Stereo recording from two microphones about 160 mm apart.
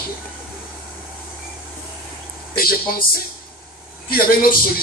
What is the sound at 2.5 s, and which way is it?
Speech, 70° left (ahead or behind).